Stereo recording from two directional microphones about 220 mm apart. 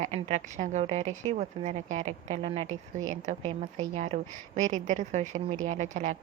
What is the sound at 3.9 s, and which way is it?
A woman's voice, 30° right (ahead or behind).